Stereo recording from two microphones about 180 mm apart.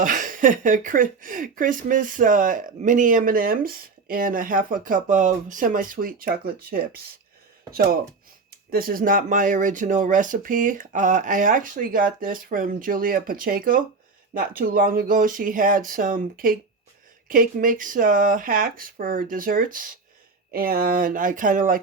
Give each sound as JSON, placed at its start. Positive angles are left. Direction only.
{"t": 0.0, "sound": "speech", "side_deg": -50}
{"t": 8.7, "sound": "speech", "side_deg": -55}